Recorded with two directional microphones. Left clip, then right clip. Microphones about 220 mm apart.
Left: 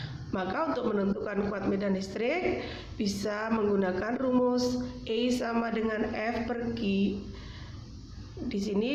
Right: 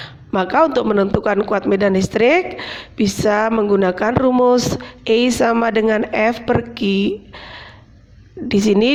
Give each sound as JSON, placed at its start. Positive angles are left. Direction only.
{"t": 0.0, "sound": "a man's voice", "side_deg": -45}